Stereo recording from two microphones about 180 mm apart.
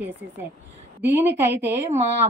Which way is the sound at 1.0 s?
10° right (ahead or behind).